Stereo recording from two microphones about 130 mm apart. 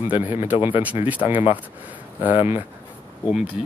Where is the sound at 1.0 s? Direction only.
10° right (ahead or behind).